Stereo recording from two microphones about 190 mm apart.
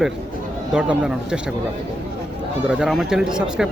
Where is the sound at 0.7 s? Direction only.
5° right (ahead or behind).